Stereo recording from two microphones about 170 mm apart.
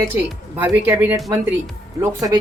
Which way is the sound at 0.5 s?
10° right (ahead or behind).